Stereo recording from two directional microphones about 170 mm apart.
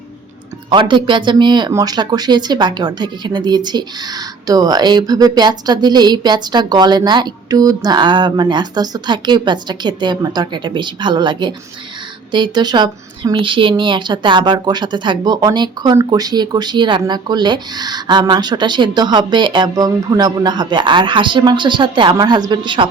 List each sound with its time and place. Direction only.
0.7 s speech: 30° right (ahead or behind)